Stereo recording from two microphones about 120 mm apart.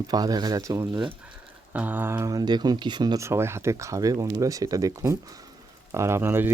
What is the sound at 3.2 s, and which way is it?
Speech, 20° right (ahead or behind).